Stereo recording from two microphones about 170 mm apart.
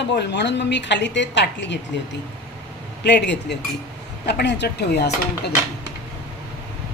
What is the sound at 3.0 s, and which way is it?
Speech, 85° left.